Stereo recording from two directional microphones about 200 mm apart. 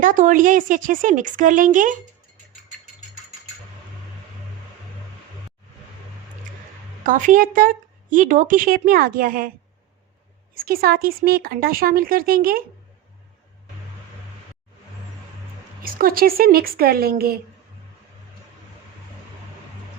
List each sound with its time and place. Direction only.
0.0 s speech: 40° right (ahead or behind)
7.0 s speech: 40° right (ahead or behind)
10.5 s speech: 45° right (ahead or behind)
15.8 s speech: 45° right (ahead or behind)